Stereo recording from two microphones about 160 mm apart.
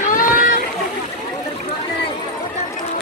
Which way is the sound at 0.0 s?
60° left (ahead or behind).